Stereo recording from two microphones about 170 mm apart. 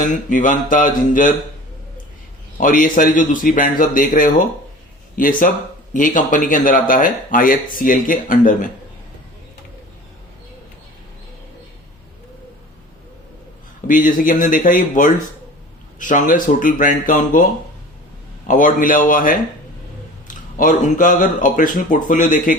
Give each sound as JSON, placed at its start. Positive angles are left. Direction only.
{"t": 0.0, "sound": "speech", "side_deg": 50}
{"t": 2.6, "sound": "speech", "side_deg": 50}
{"t": 13.8, "sound": "speech", "side_deg": 50}
{"t": 18.4, "sound": "speech", "side_deg": 50}